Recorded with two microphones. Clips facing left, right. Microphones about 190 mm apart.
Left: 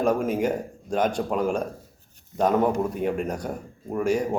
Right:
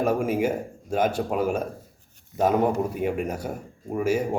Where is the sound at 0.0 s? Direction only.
10° right (ahead or behind).